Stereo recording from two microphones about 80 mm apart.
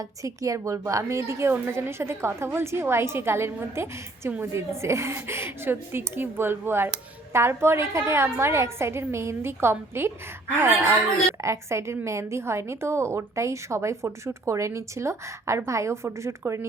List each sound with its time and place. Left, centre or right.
0.2 s a woman's voice: right